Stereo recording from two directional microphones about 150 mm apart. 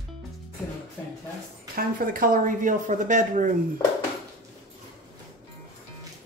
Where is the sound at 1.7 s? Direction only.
70° right (ahead or behind).